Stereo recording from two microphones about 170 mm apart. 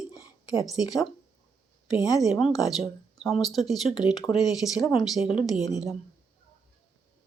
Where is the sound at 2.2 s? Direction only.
Centre (ahead or behind).